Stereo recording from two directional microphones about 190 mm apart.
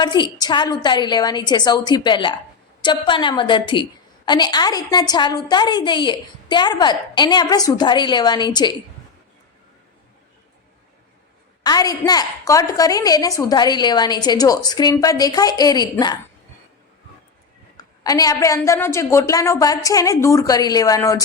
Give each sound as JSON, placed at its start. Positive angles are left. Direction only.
{"t": 0.0, "sound": "a woman's voice", "side_deg": 25}
{"t": 11.6, "sound": "a woman's voice", "side_deg": 20}
{"t": 18.0, "sound": "a woman's voice", "side_deg": 20}